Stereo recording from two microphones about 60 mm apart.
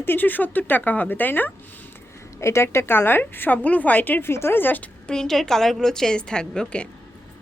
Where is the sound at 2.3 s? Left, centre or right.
Left.